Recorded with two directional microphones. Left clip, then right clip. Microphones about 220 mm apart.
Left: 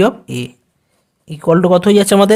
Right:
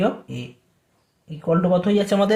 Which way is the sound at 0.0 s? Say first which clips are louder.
Left 9 dB; 50° left (ahead or behind).